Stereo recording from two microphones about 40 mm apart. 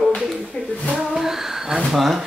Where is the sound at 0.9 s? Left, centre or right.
Centre.